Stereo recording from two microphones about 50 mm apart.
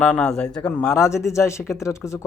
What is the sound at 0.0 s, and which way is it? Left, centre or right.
Speech, left.